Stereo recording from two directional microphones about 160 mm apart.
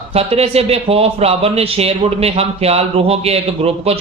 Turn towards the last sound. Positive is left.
turn(degrees=-40)  # may be behind; listen again after turning